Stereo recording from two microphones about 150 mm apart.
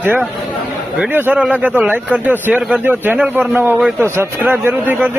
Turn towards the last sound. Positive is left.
turn(degrees=-15)  # may be behind; listen again after turning